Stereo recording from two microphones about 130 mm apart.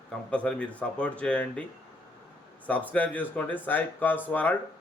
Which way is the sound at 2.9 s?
10° left (ahead or behind).